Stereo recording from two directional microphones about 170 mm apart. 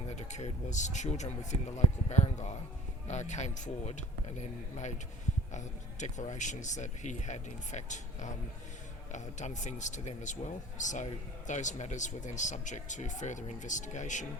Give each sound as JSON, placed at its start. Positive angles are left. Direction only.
{"t": 0.2, "sound": "speech", "side_deg": 40}
{"t": 5.5, "sound": "speech", "side_deg": 45}